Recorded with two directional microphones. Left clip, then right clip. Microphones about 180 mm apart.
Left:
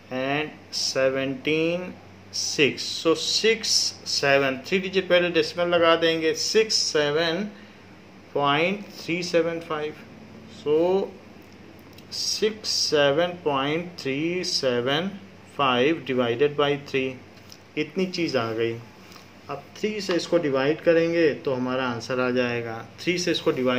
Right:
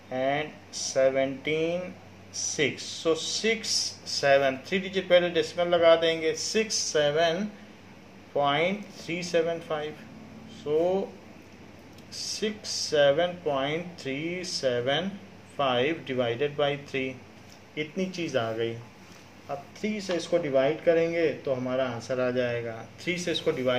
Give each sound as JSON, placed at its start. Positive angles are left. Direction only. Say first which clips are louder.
{"t": 0.1, "sound": "speech", "louder": "left 1 dB", "side_deg": 50}
{"t": 12.1, "sound": "speech", "louder": "left 7 dB", "side_deg": 45}
{"t": 19.8, "sound": "speech", "louder": "left 6 dB", "side_deg": 50}